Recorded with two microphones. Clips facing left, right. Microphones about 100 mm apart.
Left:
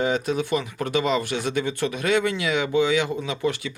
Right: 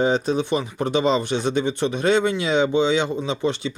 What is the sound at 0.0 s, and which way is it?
Speech, 25° right (ahead or behind).